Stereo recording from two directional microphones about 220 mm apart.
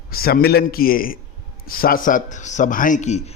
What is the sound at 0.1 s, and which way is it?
A man's voice, 40° left (ahead or behind).